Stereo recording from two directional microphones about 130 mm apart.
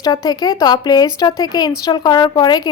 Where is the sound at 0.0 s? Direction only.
30° left (ahead or behind).